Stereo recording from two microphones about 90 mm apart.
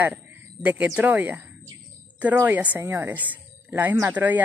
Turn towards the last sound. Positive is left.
turn(degrees=-20)  # may be behind; listen again after turning